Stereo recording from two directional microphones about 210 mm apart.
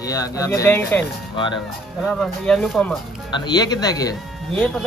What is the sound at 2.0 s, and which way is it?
Speech, centre (ahead or behind).